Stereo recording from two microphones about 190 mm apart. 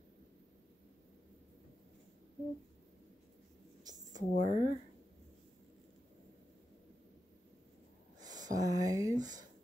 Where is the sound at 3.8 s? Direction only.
20° right (ahead or behind).